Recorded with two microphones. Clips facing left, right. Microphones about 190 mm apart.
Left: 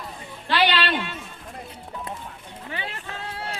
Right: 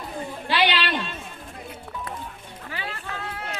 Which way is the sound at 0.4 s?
10° right (ahead or behind).